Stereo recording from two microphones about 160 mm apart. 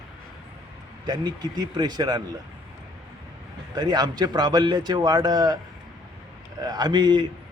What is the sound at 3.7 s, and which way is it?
A man's voice, 25° right (ahead or behind).